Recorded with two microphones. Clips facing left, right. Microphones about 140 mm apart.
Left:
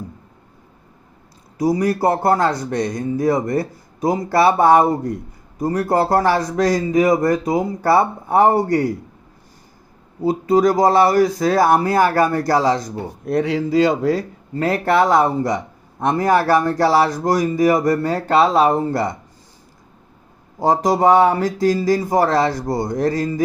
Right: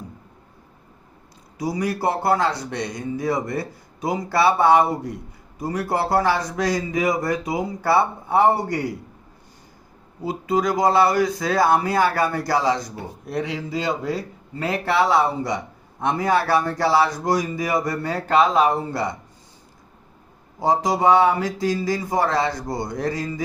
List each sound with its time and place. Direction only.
1.5 s a man's voice: 45° left (ahead or behind)
10.2 s a man's voice: 40° left (ahead or behind)
13.7 s speech: 90° left
14.6 s a man's voice: 45° left (ahead or behind)
20.6 s speech: 40° left (ahead or behind)